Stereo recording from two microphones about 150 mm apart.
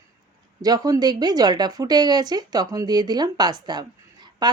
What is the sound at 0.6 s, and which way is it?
Speech, 25° right (ahead or behind).